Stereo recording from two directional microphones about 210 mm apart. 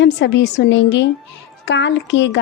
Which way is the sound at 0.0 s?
55° left (ahead or behind).